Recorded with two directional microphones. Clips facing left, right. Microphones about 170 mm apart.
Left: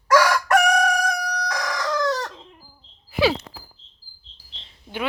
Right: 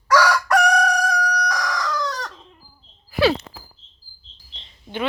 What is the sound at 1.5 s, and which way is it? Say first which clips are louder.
Chicken: right 1 dB; 25° left (ahead or behind).